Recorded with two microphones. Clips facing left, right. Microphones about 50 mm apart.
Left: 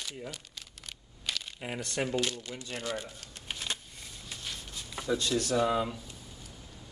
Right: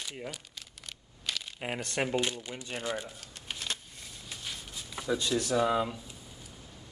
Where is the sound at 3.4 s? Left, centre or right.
Centre.